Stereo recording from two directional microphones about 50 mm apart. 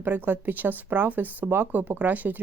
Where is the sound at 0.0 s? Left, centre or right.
Right.